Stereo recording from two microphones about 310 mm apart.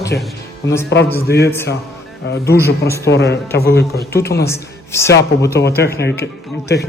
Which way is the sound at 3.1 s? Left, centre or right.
Left.